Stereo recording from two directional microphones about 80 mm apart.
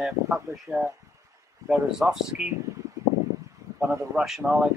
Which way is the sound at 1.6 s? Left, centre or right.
Centre.